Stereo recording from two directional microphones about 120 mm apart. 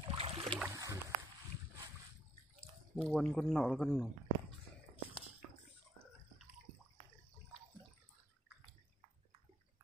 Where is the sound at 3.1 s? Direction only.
5° left (ahead or behind).